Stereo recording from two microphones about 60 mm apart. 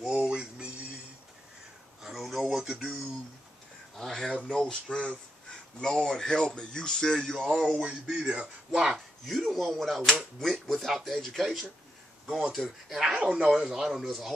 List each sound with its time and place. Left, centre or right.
0.0 s a sound: centre
2.0 s a sound: centre
2.4 s music: centre
3.9 s speech: centre
5.8 s speech: centre
7.8 s speech: centre
12.3 s speech: centre